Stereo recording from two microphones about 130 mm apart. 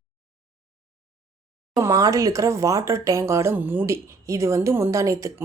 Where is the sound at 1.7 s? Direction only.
25° right (ahead or behind).